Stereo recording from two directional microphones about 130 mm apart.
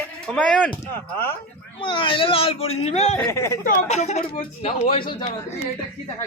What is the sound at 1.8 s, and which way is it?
Speech, 40° left (ahead or behind).